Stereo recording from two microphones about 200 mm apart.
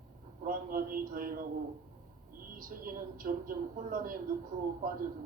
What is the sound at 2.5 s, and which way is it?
A man's voice, 45° right (ahead or behind).